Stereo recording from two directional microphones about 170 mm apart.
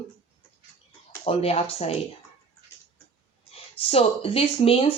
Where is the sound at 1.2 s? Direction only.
35° left (ahead or behind).